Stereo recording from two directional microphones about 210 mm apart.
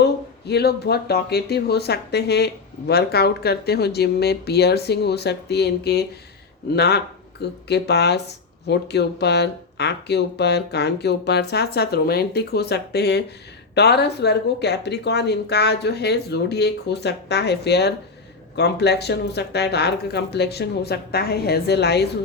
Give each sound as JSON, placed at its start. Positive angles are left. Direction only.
{"t": 0.0, "sound": "speech", "side_deg": 50}